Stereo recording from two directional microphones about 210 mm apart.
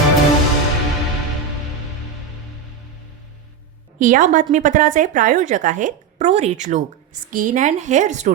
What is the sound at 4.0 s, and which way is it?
A woman's voice, 40° right (ahead or behind).